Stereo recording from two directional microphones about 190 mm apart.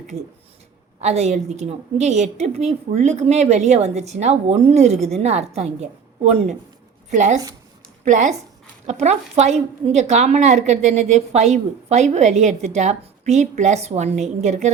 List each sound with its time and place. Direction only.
1.0 s a woman's voice: 35° right (ahead or behind)